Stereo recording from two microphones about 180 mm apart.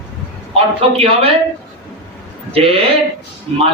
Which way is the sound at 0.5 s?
30° right (ahead or behind).